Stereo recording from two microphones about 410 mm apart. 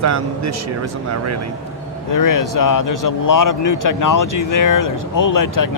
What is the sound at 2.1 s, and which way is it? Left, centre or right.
Speech, left.